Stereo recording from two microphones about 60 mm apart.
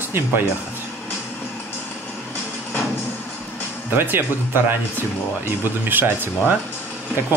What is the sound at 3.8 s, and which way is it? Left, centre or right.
Speech, right.